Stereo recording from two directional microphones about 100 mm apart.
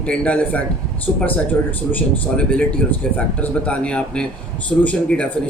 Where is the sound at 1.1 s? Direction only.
Centre (ahead or behind).